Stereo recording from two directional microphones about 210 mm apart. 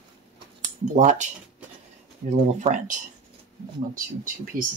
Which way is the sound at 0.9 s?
35° right (ahead or behind).